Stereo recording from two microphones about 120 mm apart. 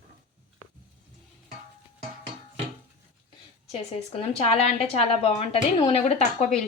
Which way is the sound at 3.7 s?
55° left (ahead or behind).